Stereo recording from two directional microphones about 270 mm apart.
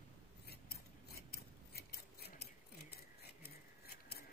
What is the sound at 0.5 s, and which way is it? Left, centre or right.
Scissors, left.